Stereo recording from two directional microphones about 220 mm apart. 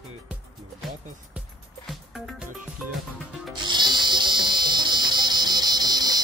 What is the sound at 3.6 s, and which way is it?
Music, 20° right (ahead or behind).